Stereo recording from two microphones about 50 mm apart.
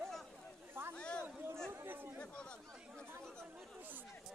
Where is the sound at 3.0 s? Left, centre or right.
Right.